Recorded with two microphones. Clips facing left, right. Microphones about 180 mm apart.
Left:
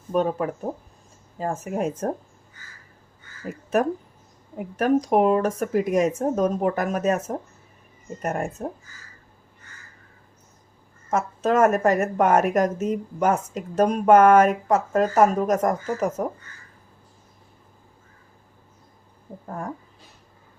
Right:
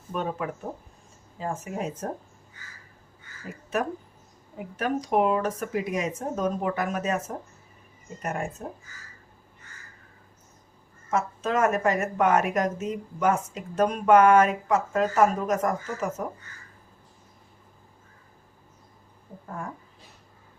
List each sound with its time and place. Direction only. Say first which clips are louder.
0.1 s speech: left 7 dB; 40° left (ahead or behind)
1.4 s a woman's voice: left 5 dB; 50° left (ahead or behind)
4.5 s a woman's voice: left 8 dB; 45° left (ahead or behind)
11.1 s a woman's voice: left 4 dB; 45° left (ahead or behind)
19.5 s speech: left 4 dB; 40° left (ahead or behind)